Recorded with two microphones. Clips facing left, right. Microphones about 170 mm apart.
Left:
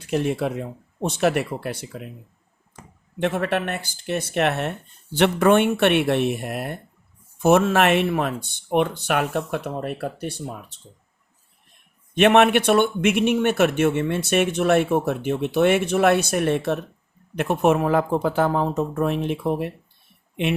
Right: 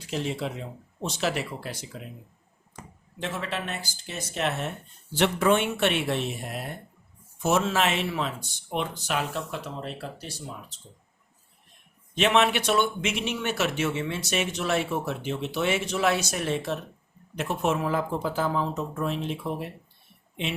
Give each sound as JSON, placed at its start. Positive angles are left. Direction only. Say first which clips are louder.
{"t": 0.0, "sound": "speech", "louder": "left 7 dB", "side_deg": 60}
{"t": 3.2, "sound": "speech", "louder": "left 9 dB", "side_deg": 60}
{"t": 12.1, "sound": "speech", "louder": "left 7 dB", "side_deg": 60}